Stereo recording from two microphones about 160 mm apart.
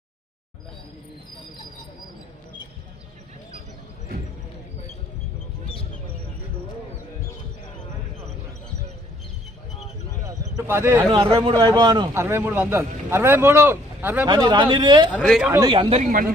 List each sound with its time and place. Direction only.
10.2 s a sound: 15° right (ahead or behind)
11.1 s speech: 35° right (ahead or behind)
12.1 s speech: 15° right (ahead or behind)
14.3 s speech: 25° right (ahead or behind)
15.1 s speech: centre (ahead or behind)
15.6 s speech: 30° right (ahead or behind)
16.0 s speech: 60° right (ahead or behind)